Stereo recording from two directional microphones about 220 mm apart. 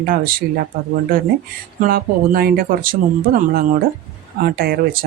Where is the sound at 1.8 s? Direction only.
40° right (ahead or behind).